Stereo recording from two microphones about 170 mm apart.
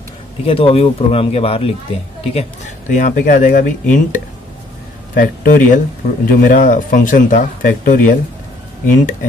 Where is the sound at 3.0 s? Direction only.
55° left (ahead or behind).